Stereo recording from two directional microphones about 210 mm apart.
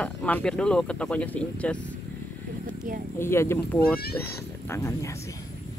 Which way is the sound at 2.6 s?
40° right (ahead or behind).